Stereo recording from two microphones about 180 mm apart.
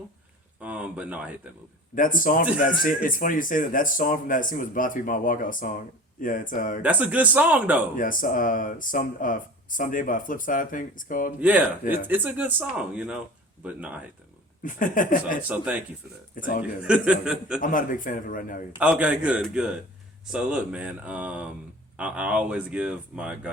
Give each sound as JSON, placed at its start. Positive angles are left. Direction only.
{"t": 0.6, "sound": "speech", "side_deg": -5}
{"t": 2.0, "sound": "speech", "side_deg": 50}
{"t": 6.8, "sound": "speech", "side_deg": -10}
{"t": 7.9, "sound": "speech", "side_deg": 50}
{"t": 11.3, "sound": "speech", "side_deg": -10}
{"t": 14.6, "sound": "speech", "side_deg": 45}
{"t": 15.4, "sound": "speech", "side_deg": -10}
{"t": 16.3, "sound": "a man's voice", "side_deg": 50}
{"t": 16.8, "sound": "a man's voice", "side_deg": -5}
{"t": 17.6, "sound": "speech", "side_deg": 50}
{"t": 18.8, "sound": "a man's voice", "side_deg": -5}